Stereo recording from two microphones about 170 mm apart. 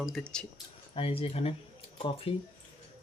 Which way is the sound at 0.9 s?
35° left (ahead or behind).